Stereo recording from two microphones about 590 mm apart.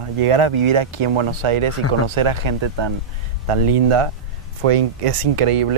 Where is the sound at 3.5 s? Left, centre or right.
Right.